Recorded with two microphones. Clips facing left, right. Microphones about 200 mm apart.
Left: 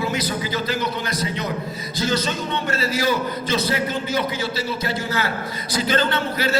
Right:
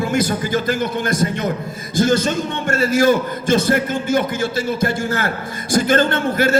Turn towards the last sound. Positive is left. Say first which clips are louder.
# right 5 dB
turn(degrees=-50)  # may be behind; listen again after turning